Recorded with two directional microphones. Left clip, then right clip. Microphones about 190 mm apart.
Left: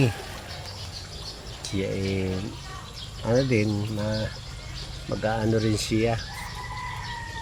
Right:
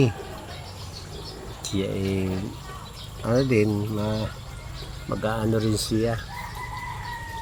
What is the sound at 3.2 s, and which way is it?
Speech, 5° left (ahead or behind).